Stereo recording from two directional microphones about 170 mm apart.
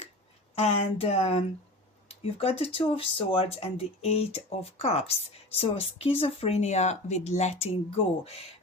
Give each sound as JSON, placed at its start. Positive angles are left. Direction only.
{"t": 0.5, "sound": "speech", "side_deg": 35}